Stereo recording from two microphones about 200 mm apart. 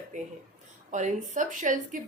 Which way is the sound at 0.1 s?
40° right (ahead or behind).